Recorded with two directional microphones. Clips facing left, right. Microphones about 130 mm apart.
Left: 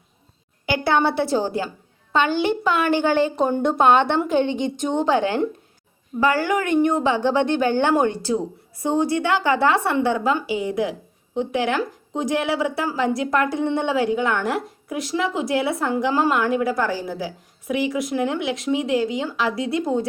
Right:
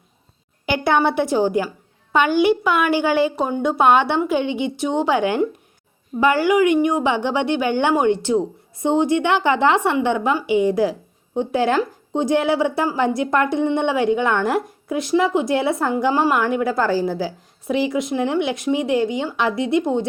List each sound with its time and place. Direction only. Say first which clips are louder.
0.6 s a woman's voice: right 2 dB; 20° right (ahead or behind)